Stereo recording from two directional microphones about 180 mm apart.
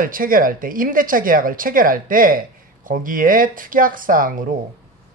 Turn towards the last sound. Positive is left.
turn(degrees=-50)  # may be behind; listen again after turning